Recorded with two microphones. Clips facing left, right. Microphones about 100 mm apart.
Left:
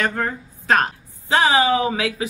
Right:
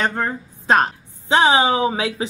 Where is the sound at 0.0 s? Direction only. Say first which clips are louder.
Right 1 dB; 25° right (ahead or behind).